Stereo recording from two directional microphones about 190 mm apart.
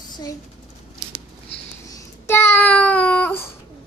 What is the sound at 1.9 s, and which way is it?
Child singing, 15° left (ahead or behind).